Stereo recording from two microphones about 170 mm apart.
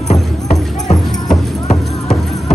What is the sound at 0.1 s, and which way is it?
Music, 40° left (ahead or behind).